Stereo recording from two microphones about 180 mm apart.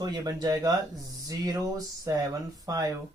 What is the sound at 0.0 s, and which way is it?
Speech, 20° right (ahead or behind).